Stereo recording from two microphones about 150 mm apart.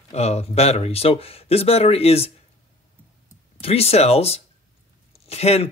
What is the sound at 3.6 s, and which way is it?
Speech, 45° left (ahead or behind).